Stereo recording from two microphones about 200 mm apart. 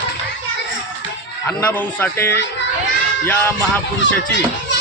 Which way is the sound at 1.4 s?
10° left (ahead or behind).